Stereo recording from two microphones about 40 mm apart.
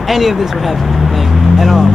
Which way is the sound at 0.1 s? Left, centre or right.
Centre.